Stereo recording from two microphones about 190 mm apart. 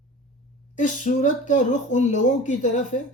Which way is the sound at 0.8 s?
40° left (ahead or behind).